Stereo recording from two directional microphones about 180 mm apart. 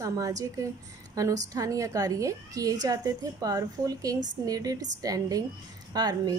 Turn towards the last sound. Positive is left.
turn(degrees=-20)  # may be behind; listen again after turning